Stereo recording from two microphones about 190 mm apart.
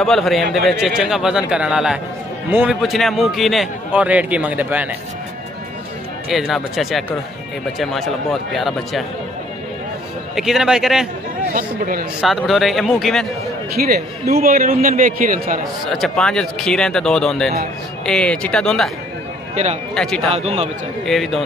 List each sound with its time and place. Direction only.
0.0 s a man's voice: centre (ahead or behind)
6.3 s a man's voice: centre (ahead or behind)
10.3 s a man's voice: centre (ahead or behind)
11.5 s a man's voice: 45° right (ahead or behind)
12.2 s a man's voice: centre (ahead or behind)
13.8 s a man's voice: 50° right (ahead or behind)
15.6 s a man's voice: centre (ahead or behind)
19.5 s speech: 35° right (ahead or behind)
19.9 s a man's voice: 5° left (ahead or behind)
20.2 s speech: 35° right (ahead or behind)
21.0 s a man's voice: centre (ahead or behind)